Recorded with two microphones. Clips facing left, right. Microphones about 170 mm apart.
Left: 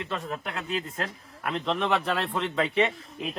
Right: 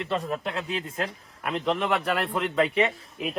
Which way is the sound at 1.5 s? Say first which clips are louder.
Right 1 dB; 5° right (ahead or behind).